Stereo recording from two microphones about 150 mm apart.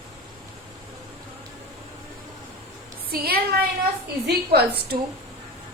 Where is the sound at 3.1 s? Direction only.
90° right.